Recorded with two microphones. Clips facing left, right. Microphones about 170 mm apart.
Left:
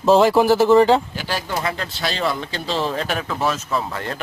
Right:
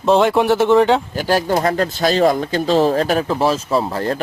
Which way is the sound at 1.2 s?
45° right (ahead or behind).